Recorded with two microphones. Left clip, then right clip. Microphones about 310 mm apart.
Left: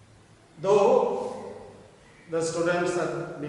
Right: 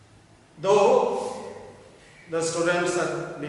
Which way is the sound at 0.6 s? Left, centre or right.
Centre.